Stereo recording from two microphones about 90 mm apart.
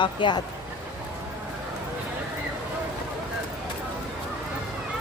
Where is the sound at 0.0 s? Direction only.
60° left (ahead or behind).